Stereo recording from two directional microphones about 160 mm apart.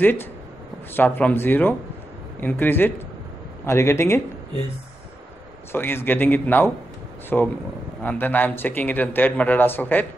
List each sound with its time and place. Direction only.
0.0 s speech: 15° left (ahead or behind)
5.7 s speech: 15° left (ahead or behind)